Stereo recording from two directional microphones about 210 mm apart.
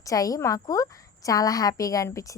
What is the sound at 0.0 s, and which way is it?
A woman's voice, 15° left (ahead or behind).